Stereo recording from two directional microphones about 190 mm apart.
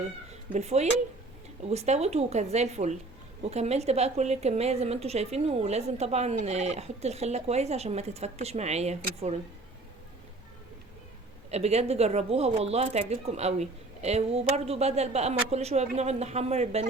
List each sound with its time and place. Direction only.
0.5 s a woman's voice: 35° right (ahead or behind)
11.5 s a woman's voice: 35° right (ahead or behind)